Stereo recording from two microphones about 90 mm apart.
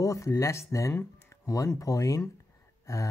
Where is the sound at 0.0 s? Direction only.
40° left (ahead or behind).